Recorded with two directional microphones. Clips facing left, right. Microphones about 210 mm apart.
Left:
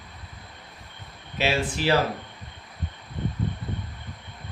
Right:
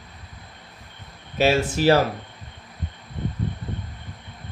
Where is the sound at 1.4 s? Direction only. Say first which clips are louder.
Right 6 dB; 45° right (ahead or behind).